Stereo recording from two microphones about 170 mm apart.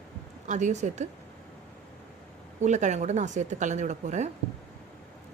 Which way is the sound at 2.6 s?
45° right (ahead or behind).